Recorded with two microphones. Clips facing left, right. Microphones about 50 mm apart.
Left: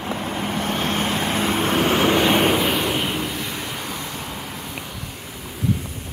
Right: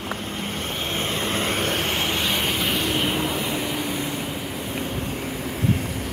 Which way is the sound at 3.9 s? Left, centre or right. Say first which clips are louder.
Right 3 dB; centre.